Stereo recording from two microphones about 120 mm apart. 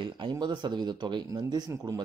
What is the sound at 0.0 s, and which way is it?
Speech, 40° right (ahead or behind).